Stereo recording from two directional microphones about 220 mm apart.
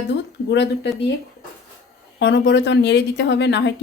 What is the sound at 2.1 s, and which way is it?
A woman's voice, 55° left (ahead or behind).